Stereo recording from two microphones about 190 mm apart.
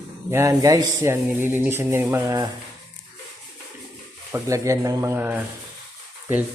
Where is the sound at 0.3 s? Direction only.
15° right (ahead or behind).